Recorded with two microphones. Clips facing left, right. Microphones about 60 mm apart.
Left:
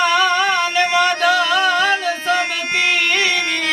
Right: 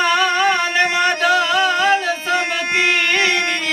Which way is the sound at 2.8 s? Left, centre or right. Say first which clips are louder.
Even; centre.